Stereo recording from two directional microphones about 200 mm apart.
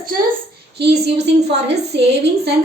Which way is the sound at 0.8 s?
55° right (ahead or behind).